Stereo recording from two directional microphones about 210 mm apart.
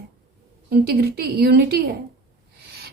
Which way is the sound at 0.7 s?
50° right (ahead or behind).